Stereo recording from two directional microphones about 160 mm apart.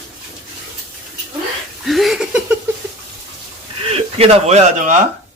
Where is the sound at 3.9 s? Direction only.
40° right (ahead or behind).